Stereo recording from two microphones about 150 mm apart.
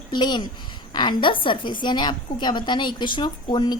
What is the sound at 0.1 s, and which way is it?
A woman's voice, 30° left (ahead or behind).